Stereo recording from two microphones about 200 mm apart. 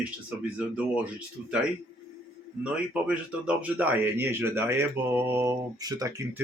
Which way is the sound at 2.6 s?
5° right (ahead or behind).